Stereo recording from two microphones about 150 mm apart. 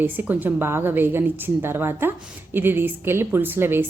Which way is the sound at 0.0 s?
10° right (ahead or behind).